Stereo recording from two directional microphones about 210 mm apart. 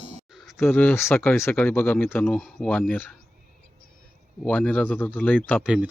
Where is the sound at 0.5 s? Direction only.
10° left (ahead or behind).